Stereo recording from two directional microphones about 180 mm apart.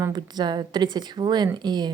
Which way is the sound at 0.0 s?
25° right (ahead or behind).